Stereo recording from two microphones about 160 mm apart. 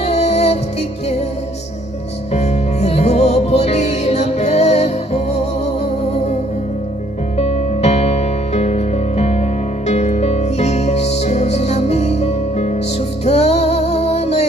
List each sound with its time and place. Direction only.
0.0 s music: 45° left (ahead or behind)
2.3 s music: 45° left (ahead or behind)
7.3 s music: 40° left (ahead or behind)